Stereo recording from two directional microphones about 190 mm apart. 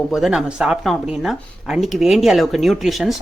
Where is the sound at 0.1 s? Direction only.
Centre (ahead or behind).